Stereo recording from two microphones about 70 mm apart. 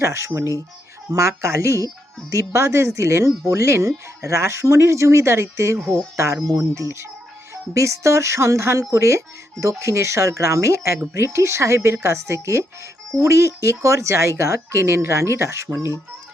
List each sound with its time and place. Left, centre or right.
0.0 s speech: right